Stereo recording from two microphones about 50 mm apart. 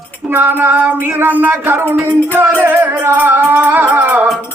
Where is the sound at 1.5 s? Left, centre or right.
Right.